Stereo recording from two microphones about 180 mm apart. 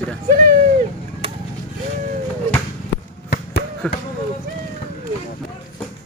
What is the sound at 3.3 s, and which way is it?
Basketball bounce, 65° left (ahead or behind).